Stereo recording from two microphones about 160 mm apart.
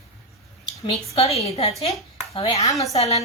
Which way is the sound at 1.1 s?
40° left (ahead or behind).